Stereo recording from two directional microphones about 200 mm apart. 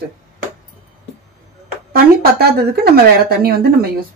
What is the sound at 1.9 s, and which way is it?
Speech, 50° right (ahead or behind).